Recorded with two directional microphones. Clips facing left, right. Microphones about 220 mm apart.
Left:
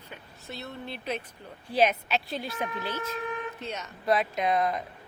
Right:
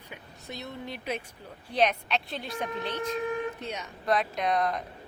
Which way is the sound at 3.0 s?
30° right (ahead or behind).